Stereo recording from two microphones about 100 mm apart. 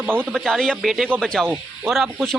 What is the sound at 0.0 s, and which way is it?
Speech, 20° right (ahead or behind).